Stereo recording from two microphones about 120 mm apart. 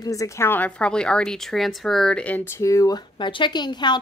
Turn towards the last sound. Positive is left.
turn(degrees=40)  # may be behind; listen again after turning